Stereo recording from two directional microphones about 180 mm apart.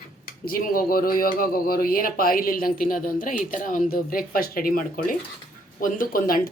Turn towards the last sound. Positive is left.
turn(degrees=50)  # may be behind; listen again after turning